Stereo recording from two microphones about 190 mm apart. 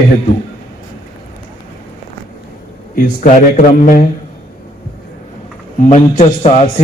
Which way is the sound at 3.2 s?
45° left (ahead or behind).